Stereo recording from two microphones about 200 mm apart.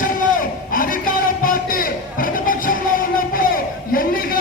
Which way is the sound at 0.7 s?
45° left (ahead or behind).